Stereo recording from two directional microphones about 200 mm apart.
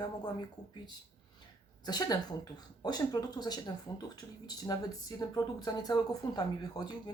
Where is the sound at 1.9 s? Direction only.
20° left (ahead or behind).